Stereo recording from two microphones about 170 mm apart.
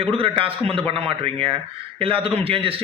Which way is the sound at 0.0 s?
35° right (ahead or behind).